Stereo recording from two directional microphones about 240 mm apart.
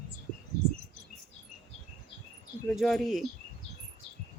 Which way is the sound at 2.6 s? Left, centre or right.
Centre.